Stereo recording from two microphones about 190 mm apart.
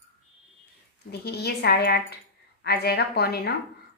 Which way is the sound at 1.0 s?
55° left (ahead or behind).